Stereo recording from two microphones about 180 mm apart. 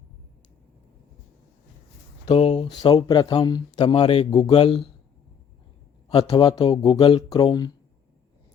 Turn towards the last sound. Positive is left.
turn(degrees=25)  # may be behind; listen again after turning